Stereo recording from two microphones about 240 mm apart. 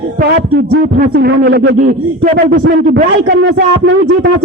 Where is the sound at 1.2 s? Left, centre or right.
Right.